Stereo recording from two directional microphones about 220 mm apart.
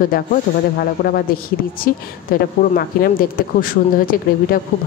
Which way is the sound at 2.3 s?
40° left (ahead or behind).